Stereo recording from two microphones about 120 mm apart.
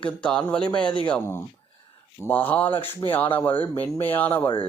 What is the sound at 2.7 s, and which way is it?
Speech, 45° left (ahead or behind).